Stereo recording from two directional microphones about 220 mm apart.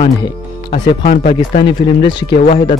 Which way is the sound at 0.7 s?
35° left (ahead or behind).